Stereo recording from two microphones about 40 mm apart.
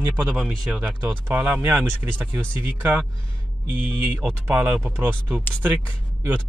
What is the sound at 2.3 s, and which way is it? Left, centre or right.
Speech, right.